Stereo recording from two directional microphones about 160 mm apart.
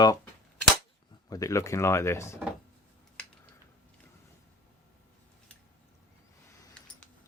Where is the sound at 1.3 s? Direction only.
20° left (ahead or behind).